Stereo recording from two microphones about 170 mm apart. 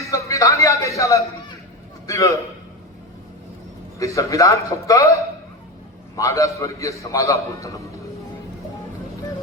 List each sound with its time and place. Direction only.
0.0 s a sound: 20° left (ahead or behind)
2.0 s a man's voice: 20° left (ahead or behind)
3.9 s a man's voice: 20° left (ahead or behind)